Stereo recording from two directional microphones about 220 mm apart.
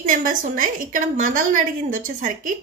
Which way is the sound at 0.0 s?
40° right (ahead or behind).